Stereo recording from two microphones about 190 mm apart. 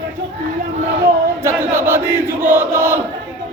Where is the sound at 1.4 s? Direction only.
15° right (ahead or behind).